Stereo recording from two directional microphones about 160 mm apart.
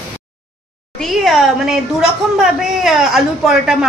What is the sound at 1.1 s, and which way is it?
A woman's voice, centre (ahead or behind).